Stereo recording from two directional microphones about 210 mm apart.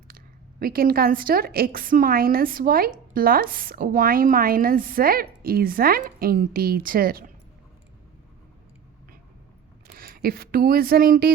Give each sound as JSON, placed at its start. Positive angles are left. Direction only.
{"t": 0.6, "sound": "a woman's voice", "side_deg": -45}
{"t": 9.8, "sound": "speech", "side_deg": -45}